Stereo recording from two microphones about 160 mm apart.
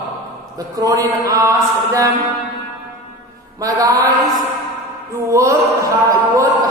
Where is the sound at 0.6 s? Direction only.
25° right (ahead or behind).